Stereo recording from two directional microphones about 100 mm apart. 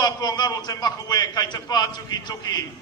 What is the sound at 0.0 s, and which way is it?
A man's voice, 45° left (ahead or behind).